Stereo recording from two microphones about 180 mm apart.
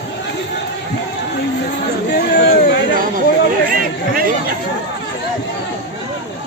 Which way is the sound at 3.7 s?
50° right (ahead or behind).